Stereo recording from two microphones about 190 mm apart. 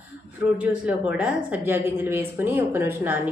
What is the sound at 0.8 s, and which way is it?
A woman's voice, 5° right (ahead or behind).